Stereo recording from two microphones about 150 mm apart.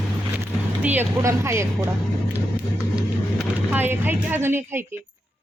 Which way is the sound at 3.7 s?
15° right (ahead or behind).